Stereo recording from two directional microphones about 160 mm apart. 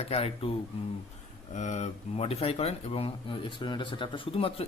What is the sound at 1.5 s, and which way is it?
Speech, 50° left (ahead or behind).